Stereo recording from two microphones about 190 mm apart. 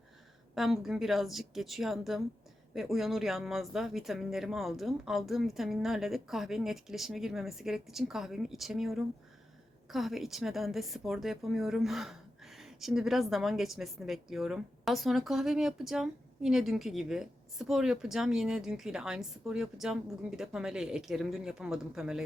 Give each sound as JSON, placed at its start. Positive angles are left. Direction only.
{"t": 0.5, "sound": "a woman's voice", "side_deg": 0}